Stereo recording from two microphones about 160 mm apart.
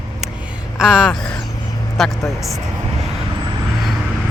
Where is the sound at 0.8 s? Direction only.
5° right (ahead or behind).